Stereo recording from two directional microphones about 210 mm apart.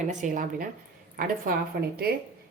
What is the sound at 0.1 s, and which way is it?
A woman's voice, 35° right (ahead or behind).